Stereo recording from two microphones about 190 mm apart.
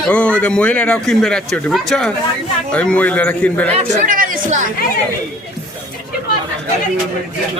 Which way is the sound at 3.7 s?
40° right (ahead or behind).